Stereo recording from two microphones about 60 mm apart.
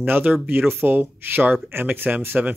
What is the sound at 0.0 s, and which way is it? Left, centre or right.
Speech, right.